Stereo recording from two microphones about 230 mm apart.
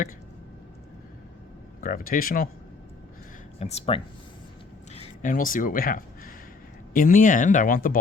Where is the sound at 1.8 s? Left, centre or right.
Left.